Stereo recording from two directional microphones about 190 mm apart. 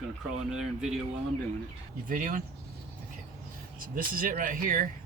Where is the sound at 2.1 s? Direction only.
45° right (ahead or behind).